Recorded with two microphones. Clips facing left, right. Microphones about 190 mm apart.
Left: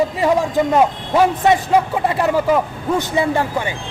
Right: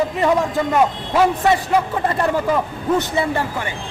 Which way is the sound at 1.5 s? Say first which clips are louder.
Left 2 dB; 10° left (ahead or behind).